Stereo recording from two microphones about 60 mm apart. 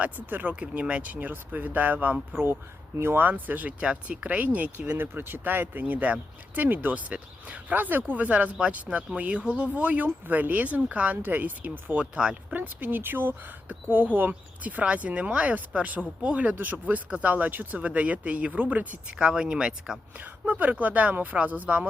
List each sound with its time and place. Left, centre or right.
0.0 s speech: right
12.1 s speech: centre
12.5 s speech: right
19.1 s speech: centre
20.5 s speech: right